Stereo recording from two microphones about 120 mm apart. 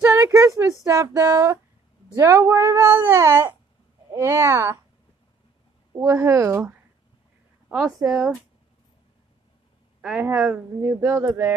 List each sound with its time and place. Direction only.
0.0 s speech: 20° right (ahead or behind)
6.0 s speech: 25° right (ahead or behind)
7.7 s speech: 5° right (ahead or behind)
10.2 s speech: 25° right (ahead or behind)